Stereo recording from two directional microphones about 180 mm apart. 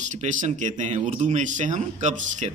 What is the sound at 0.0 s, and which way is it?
Speech, 45° right (ahead or behind).